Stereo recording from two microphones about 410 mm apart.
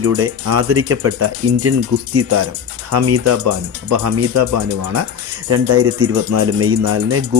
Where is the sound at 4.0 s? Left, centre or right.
Right.